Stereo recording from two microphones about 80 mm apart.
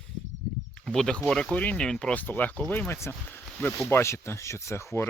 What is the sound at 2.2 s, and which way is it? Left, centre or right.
Speech, left.